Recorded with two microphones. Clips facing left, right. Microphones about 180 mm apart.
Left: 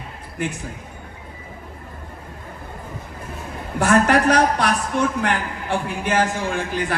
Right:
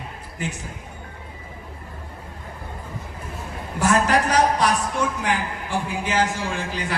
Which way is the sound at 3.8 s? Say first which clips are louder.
Left 3 dB; 60° left (ahead or behind).